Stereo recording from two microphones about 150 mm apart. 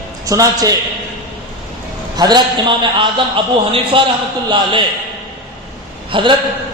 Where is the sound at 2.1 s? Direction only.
25° right (ahead or behind).